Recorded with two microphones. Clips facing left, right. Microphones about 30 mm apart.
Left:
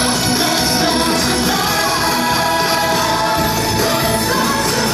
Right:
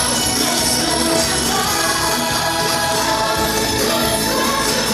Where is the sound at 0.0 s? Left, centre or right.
Left.